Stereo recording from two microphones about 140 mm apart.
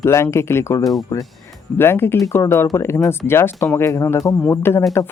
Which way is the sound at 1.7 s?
15° left (ahead or behind).